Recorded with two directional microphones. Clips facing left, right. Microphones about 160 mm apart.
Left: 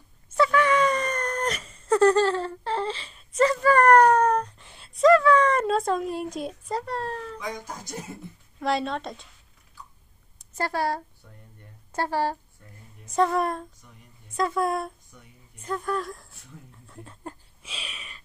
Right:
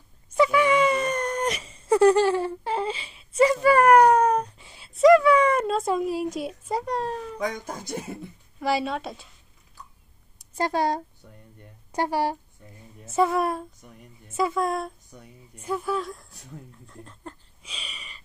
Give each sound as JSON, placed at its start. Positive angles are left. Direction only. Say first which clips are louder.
{"t": 0.3, "sound": "wail", "louder": "right 1 dB", "side_deg": -10}
{"t": 5.6, "sound": "a woman's voice", "louder": "even", "side_deg": 0}
{"t": 6.8, "sound": "speech", "louder": "right 3 dB", "side_deg": -15}
{"t": 8.5, "sound": "a woman's voice", "louder": "right 1 dB", "side_deg": -5}
{"t": 10.5, "sound": "a woman's voice", "louder": "right 3 dB", "side_deg": -20}
{"t": 16.8, "sound": "a sound", "louder": "left 1 dB", "side_deg": 5}